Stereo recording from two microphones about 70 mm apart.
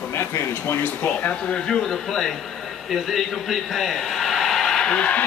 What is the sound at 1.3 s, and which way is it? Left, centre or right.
Speech, centre.